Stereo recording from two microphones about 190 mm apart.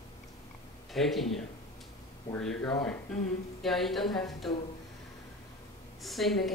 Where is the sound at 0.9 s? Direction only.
Centre (ahead or behind).